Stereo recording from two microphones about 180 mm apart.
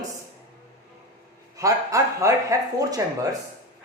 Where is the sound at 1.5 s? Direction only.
20° right (ahead or behind).